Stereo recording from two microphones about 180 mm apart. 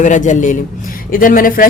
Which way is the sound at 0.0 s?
45° left (ahead or behind).